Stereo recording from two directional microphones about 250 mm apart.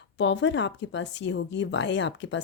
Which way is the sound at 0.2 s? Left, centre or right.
Left.